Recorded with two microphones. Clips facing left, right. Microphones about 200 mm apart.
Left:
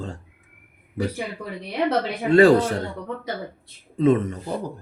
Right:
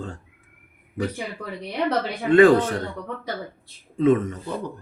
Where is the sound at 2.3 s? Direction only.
35° left (ahead or behind).